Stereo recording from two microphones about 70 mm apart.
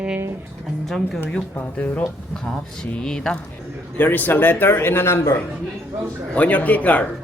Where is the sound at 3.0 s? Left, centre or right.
Centre.